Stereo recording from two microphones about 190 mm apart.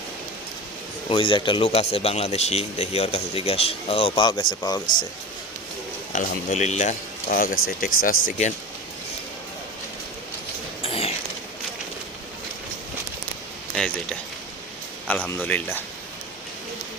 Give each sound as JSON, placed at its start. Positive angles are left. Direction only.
{"t": 1.1, "sound": "speech", "side_deg": 25}
{"t": 6.1, "sound": "speech", "side_deg": 35}
{"t": 7.9, "sound": "speech", "side_deg": 90}
{"t": 10.8, "sound": "a sound", "side_deg": 30}
{"t": 13.7, "sound": "a sound", "side_deg": 5}
{"t": 15.0, "sound": "speech", "side_deg": 10}